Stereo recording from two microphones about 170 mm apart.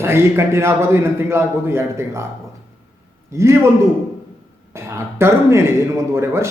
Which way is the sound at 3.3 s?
15° right (ahead or behind).